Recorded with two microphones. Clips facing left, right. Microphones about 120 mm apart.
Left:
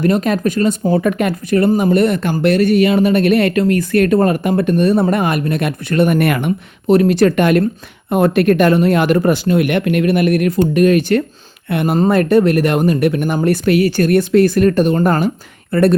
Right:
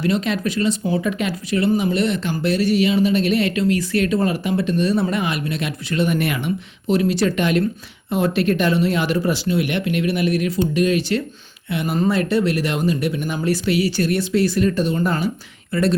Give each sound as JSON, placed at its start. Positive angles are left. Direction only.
{"t": 0.0, "sound": "speech", "side_deg": 50}